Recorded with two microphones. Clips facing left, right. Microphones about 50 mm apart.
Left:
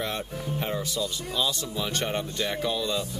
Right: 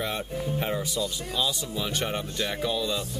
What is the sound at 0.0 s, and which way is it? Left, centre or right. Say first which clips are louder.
Speech: right 1 dB; centre.